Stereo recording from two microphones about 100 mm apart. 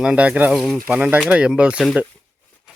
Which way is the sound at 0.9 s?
15° right (ahead or behind).